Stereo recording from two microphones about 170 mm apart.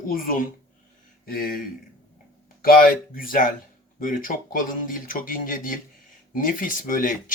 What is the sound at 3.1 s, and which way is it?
Speech, 55° left (ahead or behind).